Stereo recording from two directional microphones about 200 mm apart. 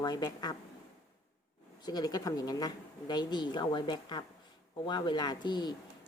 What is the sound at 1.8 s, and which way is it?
Speech, 20° left (ahead or behind).